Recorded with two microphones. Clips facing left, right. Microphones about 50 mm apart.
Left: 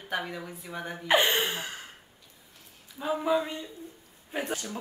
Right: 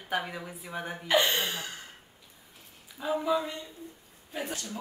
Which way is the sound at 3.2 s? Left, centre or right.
Left.